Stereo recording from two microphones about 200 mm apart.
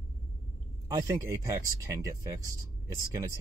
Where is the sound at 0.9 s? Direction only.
20° right (ahead or behind).